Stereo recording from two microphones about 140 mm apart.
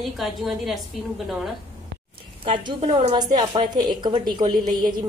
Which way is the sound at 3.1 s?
30° right (ahead or behind).